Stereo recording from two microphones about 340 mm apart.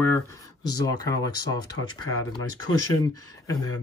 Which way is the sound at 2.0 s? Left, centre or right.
Left.